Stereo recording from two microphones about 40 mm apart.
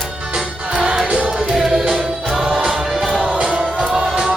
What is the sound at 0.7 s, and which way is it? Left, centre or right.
Music, right.